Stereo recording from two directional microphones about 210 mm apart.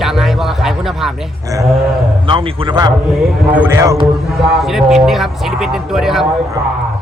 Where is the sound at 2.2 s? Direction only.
25° right (ahead or behind).